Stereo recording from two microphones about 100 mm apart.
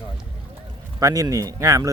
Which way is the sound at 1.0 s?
35° right (ahead or behind).